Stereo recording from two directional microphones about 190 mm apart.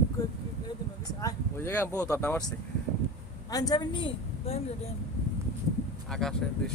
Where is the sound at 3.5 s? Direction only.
20° left (ahead or behind).